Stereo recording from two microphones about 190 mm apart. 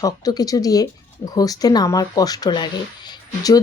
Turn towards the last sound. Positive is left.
turn(degrees=20)  # may be behind; listen again after turning